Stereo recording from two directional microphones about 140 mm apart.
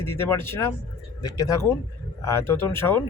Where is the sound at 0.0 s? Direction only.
15° left (ahead or behind).